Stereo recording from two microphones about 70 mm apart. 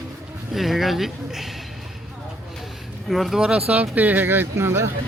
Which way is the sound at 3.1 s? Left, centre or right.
Centre.